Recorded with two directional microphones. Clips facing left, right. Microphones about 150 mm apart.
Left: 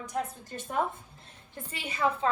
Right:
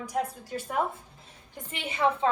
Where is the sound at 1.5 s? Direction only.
25° right (ahead or behind).